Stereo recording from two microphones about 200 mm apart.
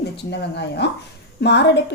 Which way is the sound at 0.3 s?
60° left (ahead or behind).